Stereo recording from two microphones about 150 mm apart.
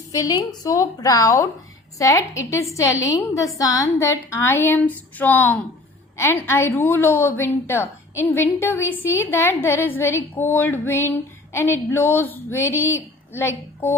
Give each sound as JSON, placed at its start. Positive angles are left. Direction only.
{"t": 0.1, "sound": "a woman's voice", "side_deg": 25}